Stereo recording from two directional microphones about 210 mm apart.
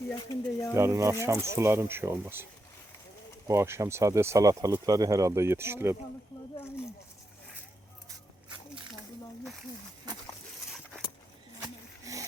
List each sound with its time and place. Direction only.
0.1 s speech: 15° left (ahead or behind)
0.7 s speech: 10° right (ahead or behind)
12.1 s a sound: 15° right (ahead or behind)